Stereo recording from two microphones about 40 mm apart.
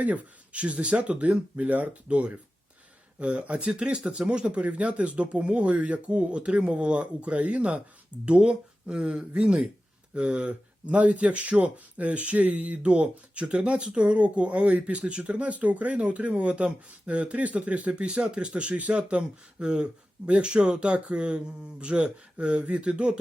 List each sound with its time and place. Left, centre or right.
0.0 s speech: right
2.0 s speech: right